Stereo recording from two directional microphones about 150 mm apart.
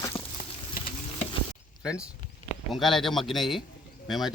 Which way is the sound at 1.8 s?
5° right (ahead or behind).